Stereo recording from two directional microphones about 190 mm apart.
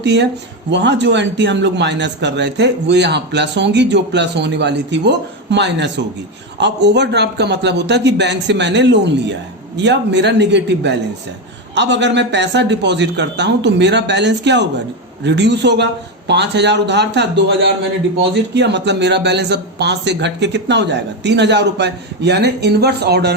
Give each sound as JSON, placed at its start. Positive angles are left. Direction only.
{"t": 0.0, "sound": "speech", "side_deg": -65}